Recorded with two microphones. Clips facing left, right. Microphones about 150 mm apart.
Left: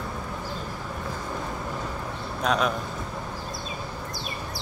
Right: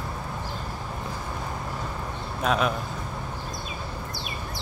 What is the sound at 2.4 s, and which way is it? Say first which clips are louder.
Speech: even; 5° right (ahead or behind).